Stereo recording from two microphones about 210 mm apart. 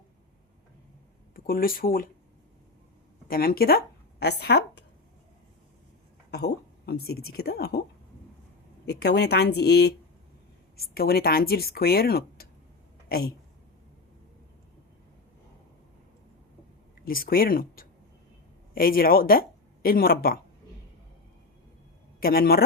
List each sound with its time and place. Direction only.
1.5 s speech: 45° left (ahead or behind)
3.2 s speech: 45° left (ahead or behind)
6.3 s speech: 50° left (ahead or behind)
8.9 s a woman's voice: 50° left (ahead or behind)
17.1 s speech: 45° left (ahead or behind)
22.2 s speech: 45° left (ahead or behind)